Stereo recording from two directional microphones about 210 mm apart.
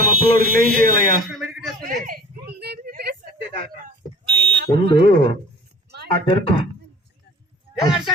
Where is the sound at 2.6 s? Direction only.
50° right (ahead or behind).